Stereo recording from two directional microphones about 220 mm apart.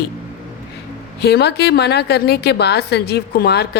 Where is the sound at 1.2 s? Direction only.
50° left (ahead or behind).